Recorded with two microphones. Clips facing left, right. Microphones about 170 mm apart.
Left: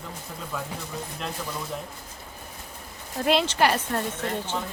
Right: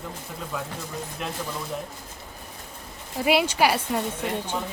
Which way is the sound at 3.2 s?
10° right (ahead or behind).